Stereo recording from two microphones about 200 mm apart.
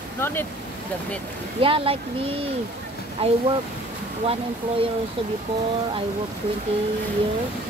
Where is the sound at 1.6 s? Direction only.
25° right (ahead or behind).